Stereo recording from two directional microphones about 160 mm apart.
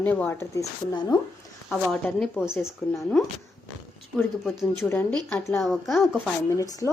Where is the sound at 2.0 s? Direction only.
5° left (ahead or behind).